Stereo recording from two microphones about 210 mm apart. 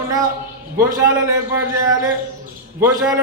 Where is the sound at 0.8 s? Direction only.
10° right (ahead or behind).